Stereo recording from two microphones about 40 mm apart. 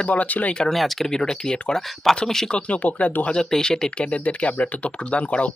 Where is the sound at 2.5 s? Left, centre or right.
Left.